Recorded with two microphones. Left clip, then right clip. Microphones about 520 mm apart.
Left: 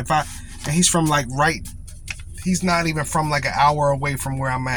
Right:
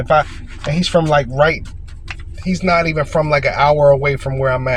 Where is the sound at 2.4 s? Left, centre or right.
Left.